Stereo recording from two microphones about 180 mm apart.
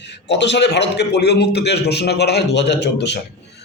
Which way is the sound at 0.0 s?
70° left (ahead or behind).